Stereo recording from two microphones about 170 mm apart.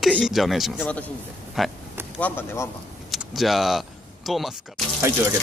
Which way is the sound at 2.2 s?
10° left (ahead or behind).